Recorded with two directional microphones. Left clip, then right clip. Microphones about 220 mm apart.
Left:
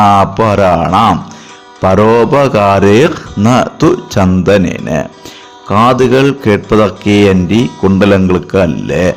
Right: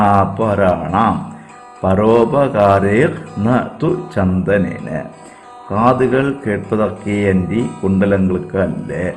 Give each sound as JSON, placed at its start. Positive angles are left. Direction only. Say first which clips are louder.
{"t": 0.0, "sound": "mantra", "louder": "left 6 dB", "side_deg": 25}